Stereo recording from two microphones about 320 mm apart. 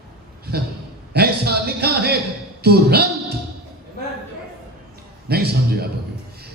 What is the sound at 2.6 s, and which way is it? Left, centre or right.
Speech, right.